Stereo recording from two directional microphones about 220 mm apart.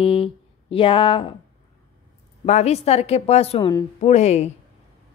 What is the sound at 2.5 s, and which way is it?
A woman's voice, 30° left (ahead or behind).